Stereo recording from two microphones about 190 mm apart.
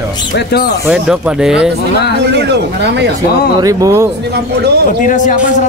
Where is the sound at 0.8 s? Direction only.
5° right (ahead or behind).